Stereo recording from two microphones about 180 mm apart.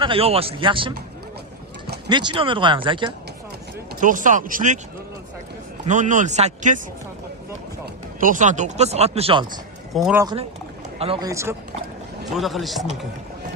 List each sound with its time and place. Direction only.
0.0 s speech: 30° right (ahead or behind)
2.0 s speech: 25° right (ahead or behind)
4.0 s speech: 45° right (ahead or behind)
5.8 s speech: 45° right (ahead or behind)
8.2 s speech: 45° right (ahead or behind); by 9.6 s 25° right (ahead or behind)
9.9 s speech: centre (ahead or behind)
10.9 s speech: 35° right (ahead or behind)
11.2 s speech: 15° right (ahead or behind)
12.3 s speech: centre (ahead or behind)